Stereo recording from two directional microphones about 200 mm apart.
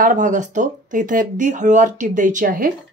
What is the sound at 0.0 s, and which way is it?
Speech, 40° right (ahead or behind).